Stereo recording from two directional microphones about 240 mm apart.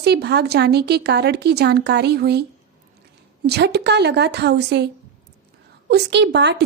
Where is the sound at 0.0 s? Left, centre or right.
Right.